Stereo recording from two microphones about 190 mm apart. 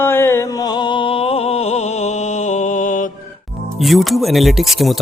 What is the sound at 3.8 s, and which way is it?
Mantra, centre (ahead or behind).